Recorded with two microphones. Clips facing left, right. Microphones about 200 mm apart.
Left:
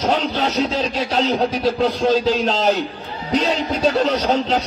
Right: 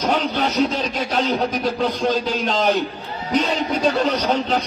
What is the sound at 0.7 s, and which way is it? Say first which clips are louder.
A man's voice: left 2 dB; 35° left (ahead or behind).